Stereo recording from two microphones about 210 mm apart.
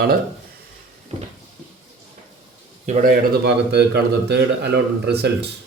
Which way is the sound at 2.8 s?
40° right (ahead or behind).